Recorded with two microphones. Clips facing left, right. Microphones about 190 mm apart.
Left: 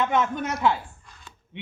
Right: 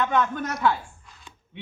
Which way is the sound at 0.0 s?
20° left (ahead or behind).